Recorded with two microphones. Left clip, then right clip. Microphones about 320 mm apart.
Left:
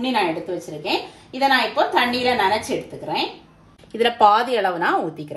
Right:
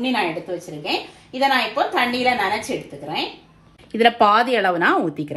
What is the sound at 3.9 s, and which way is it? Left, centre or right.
A woman's voice, centre.